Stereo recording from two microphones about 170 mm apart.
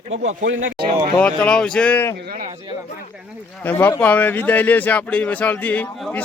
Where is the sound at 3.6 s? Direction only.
15° left (ahead or behind).